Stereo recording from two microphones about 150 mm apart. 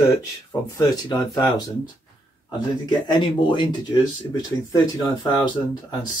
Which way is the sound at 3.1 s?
30° left (ahead or behind).